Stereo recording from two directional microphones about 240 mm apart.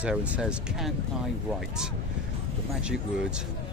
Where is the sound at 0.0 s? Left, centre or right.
Centre.